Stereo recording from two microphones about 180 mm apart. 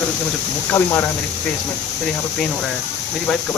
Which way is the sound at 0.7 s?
10° left (ahead or behind).